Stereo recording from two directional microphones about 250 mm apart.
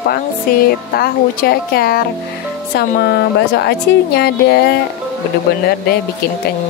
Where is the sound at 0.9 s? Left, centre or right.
Left.